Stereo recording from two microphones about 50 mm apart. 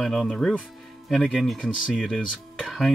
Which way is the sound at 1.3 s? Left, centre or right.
Centre.